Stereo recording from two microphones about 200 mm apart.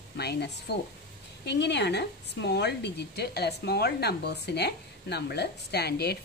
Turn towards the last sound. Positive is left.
turn(degrees=55)  # may be behind; listen again after turning